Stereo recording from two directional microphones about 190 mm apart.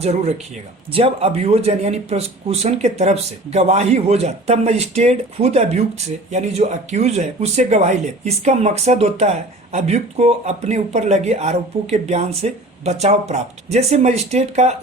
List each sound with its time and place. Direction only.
0.0 s speech: 35° right (ahead or behind)